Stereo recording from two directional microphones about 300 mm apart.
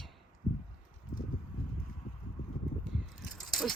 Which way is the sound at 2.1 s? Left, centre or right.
Left.